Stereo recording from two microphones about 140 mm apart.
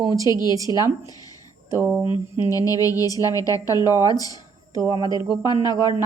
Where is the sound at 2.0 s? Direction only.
35° left (ahead or behind).